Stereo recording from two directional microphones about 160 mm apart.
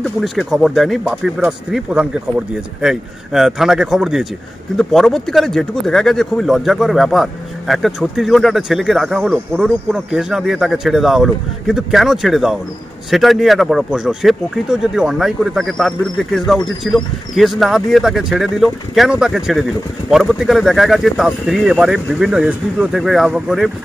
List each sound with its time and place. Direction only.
0.0 s speech: centre (ahead or behind)